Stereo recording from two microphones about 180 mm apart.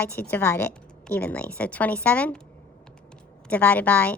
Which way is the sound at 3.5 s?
10° left (ahead or behind).